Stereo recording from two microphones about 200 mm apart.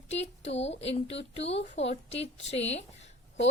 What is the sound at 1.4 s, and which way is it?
A woman's voice, 30° left (ahead or behind).